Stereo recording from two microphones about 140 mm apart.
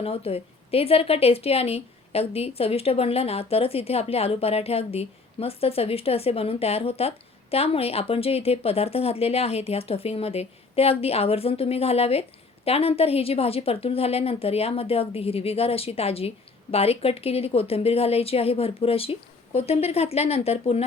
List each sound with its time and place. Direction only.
0.0 s a woman's voice: 45° left (ahead or behind)